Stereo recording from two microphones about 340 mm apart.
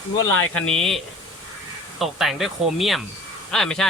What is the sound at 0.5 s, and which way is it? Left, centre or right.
Speech, centre.